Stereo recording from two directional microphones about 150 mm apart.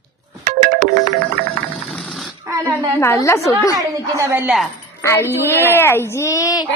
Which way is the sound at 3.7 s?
20° right (ahead or behind).